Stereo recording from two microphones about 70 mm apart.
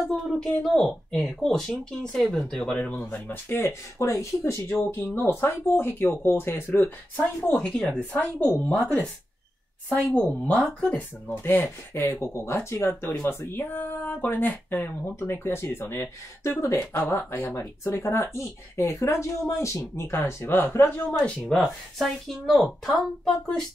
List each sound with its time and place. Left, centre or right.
0.1 s speech: centre
2.8 s a woman's voice: left
4.0 s speech: left
7.2 s a woman's voice: left
10.1 s a woman's voice: left
17.2 s speech: left
21.5 s speech: centre